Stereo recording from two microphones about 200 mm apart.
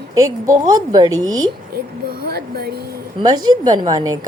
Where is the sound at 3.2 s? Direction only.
20° right (ahead or behind).